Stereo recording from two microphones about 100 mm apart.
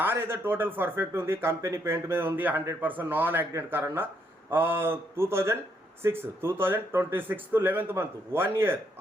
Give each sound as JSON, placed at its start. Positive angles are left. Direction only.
{"t": 0.0, "sound": "speech", "side_deg": -25}